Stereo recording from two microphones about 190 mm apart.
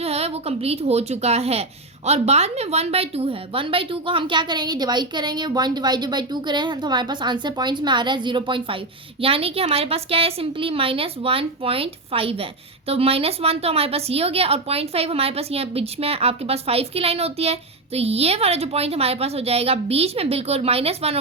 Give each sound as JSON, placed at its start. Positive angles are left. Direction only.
{"t": 0.0, "sound": "a woman's voice", "side_deg": -30}